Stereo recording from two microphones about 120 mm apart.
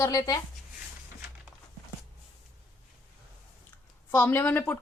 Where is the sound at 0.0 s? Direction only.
30° left (ahead or behind).